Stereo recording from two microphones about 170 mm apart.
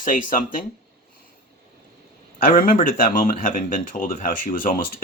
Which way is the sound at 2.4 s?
55° left (ahead or behind).